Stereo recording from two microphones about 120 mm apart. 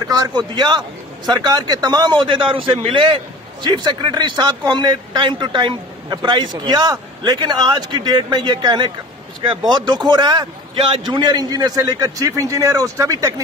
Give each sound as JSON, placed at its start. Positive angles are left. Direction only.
{"t": 0.1, "sound": "a man's voice", "side_deg": -35}